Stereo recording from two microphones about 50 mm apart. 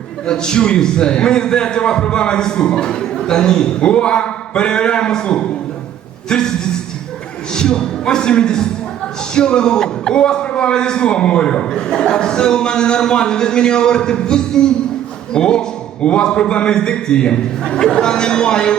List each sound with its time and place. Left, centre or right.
0.3 s a man's voice: centre
7.5 s a man's voice: centre